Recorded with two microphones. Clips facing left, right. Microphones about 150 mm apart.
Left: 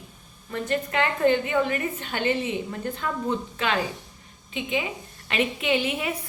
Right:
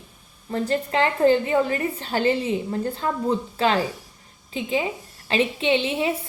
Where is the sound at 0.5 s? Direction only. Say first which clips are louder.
Right 3 dB; 35° right (ahead or behind).